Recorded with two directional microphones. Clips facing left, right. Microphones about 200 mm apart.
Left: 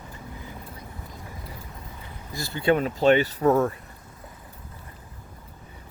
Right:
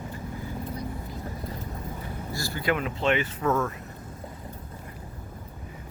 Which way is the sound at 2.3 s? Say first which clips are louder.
Left 6 dB; 20° left (ahead or behind).